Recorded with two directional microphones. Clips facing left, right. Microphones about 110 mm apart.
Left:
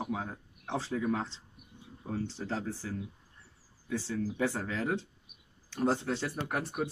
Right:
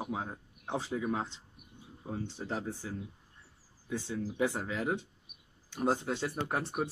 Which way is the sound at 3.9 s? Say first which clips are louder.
Left 2 dB; 20° right (ahead or behind).